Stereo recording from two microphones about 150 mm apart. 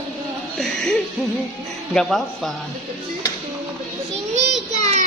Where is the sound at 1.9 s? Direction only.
Centre (ahead or behind).